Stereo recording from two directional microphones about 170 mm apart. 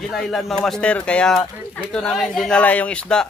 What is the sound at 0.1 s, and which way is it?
Speech, centre (ahead or behind).